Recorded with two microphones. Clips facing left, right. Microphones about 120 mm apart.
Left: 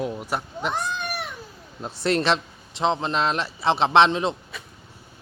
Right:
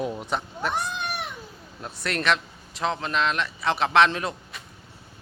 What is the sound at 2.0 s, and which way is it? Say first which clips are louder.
A man's voice: left 4 dB; 30° left (ahead or behind).